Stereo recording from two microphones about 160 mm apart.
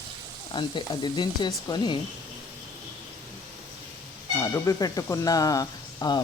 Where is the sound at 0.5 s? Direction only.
30° left (ahead or behind).